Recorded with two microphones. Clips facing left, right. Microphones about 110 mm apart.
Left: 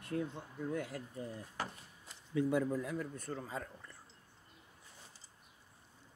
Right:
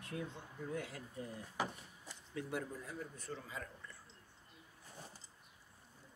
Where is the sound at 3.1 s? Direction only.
50° left (ahead or behind).